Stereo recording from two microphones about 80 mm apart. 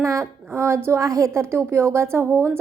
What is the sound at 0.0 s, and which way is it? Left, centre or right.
A woman's voice, right.